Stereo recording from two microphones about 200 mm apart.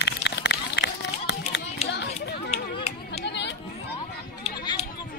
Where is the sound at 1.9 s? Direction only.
55° left (ahead or behind).